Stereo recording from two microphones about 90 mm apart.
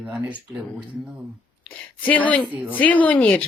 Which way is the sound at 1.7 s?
15° left (ahead or behind).